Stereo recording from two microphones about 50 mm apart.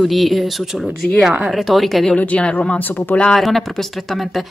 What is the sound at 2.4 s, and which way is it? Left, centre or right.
Speech, left.